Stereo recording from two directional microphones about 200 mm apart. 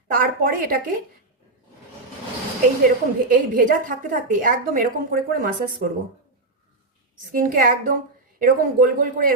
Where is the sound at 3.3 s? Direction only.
45° right (ahead or behind).